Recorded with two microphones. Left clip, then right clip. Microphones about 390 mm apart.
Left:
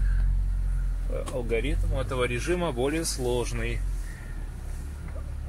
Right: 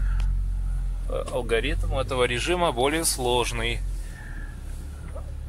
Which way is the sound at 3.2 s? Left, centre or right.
Right.